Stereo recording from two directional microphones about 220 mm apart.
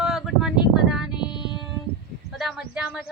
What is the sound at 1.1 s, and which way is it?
Child singing, 20° left (ahead or behind).